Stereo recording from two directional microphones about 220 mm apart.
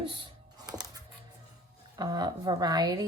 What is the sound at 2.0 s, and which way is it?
Speech, 20° right (ahead or behind).